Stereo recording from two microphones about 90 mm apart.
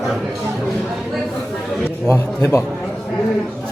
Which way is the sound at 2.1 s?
35° left (ahead or behind).